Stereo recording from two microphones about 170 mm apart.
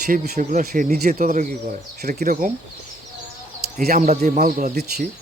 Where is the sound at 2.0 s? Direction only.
65° right (ahead or behind).